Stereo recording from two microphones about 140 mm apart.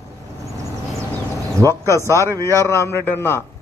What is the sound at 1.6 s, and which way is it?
A man's voice, 20° left (ahead or behind).